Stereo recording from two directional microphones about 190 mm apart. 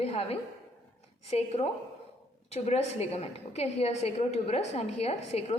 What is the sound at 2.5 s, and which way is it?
A woman's voice, 35° left (ahead or behind).